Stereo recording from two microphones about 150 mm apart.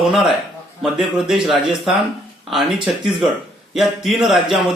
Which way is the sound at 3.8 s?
Centre (ahead or behind).